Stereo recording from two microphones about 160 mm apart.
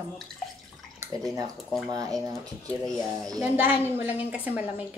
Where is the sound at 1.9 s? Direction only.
20° right (ahead or behind).